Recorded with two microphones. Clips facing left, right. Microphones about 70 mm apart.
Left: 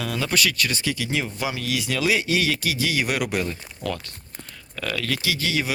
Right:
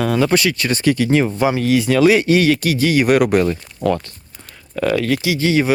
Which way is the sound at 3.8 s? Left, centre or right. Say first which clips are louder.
Right 11 dB; right.